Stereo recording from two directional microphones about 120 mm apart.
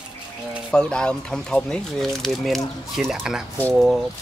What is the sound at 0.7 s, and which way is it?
Speech, 10° left (ahead or behind).